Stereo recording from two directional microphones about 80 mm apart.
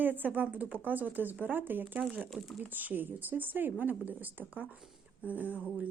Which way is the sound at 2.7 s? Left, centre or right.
Right.